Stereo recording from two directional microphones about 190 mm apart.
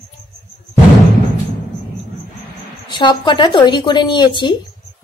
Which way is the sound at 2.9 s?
25° left (ahead or behind).